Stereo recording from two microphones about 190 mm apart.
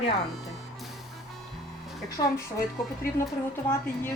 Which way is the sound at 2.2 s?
25° left (ahead or behind).